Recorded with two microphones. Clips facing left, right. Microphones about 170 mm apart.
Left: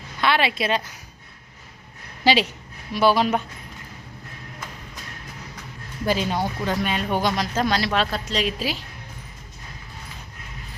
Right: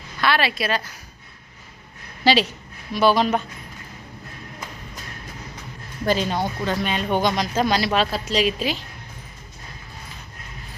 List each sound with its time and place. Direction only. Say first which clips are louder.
0.2 s a woman's voice: even; 20° left (ahead or behind)
2.2 s speech: right 1 dB; 10° left (ahead or behind)
6.1 s speech: right 1 dB; 10° left (ahead or behind)